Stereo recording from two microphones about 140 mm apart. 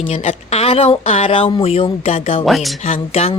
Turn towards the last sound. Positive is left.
turn(degrees=45)  # may be behind; listen again after turning